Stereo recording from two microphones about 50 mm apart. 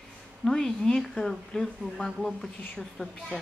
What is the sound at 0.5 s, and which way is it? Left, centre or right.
Speech, centre.